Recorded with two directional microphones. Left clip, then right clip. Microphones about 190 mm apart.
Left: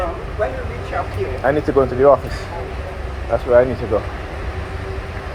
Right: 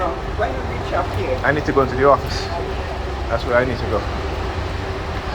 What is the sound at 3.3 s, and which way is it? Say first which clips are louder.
Speech: left 3 dB; 40° left (ahead or behind).